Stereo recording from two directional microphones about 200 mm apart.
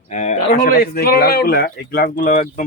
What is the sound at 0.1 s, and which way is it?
A man's voice, 35° left (ahead or behind).